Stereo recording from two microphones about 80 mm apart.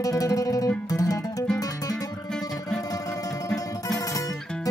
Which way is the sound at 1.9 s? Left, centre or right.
Centre.